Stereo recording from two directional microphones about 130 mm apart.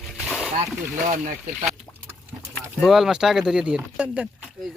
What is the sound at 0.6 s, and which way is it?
Speech, 65° right (ahead or behind).